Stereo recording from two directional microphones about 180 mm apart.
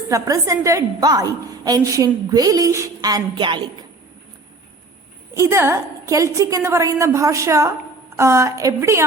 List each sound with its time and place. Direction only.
0.1 s a woman's voice: 20° right (ahead or behind)
5.3 s a woman's voice: 15° right (ahead or behind)